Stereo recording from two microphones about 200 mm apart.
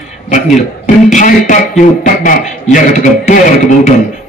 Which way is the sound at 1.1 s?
40° left (ahead or behind).